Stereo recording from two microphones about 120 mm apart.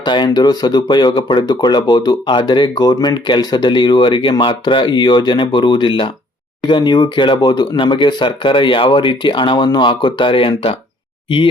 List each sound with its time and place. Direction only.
0.0 s speech: 40° left (ahead or behind)